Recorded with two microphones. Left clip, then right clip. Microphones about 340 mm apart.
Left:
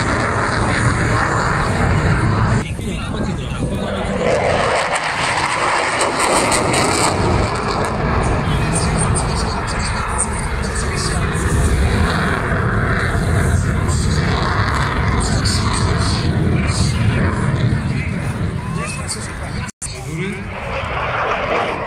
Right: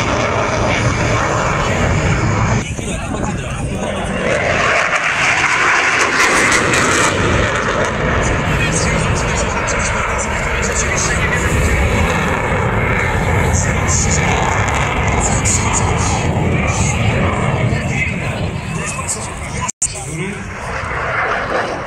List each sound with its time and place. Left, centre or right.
0.0 s vehicle: centre
4.3 s vehicle: left; by 8.3 s centre
12.1 s vehicle: centre
14.7 s a sound: centre
21.1 s vehicle: centre